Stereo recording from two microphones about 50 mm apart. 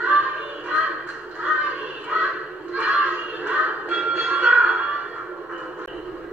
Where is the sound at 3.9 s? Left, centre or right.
Centre.